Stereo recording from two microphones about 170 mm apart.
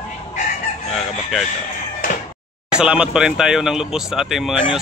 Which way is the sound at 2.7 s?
5° right (ahead or behind).